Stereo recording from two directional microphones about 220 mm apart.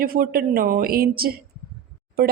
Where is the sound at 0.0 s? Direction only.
40° right (ahead or behind).